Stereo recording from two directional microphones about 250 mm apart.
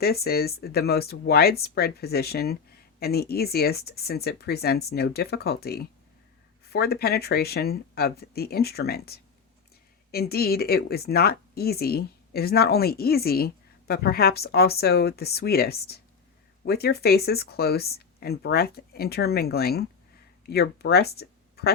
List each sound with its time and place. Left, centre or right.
0.0 s speech: left